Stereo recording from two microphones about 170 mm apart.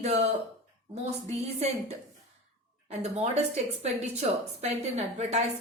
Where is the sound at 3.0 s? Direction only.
40° right (ahead or behind).